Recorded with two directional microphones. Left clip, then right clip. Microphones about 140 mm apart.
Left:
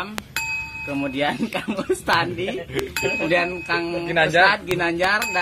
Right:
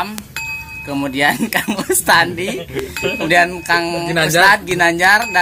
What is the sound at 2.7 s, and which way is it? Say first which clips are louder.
Speech: right 1 dB; centre (ahead or behind).